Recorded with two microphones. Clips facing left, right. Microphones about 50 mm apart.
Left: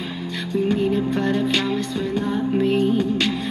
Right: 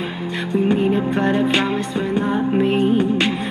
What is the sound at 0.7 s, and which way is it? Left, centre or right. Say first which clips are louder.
Music: right 2 dB; right.